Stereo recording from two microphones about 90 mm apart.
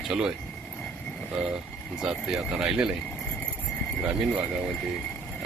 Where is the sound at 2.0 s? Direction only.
5° right (ahead or behind).